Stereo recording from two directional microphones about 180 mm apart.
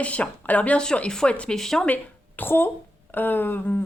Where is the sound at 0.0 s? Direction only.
5° left (ahead or behind).